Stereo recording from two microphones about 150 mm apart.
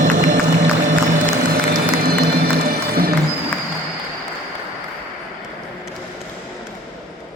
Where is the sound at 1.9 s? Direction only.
90° right.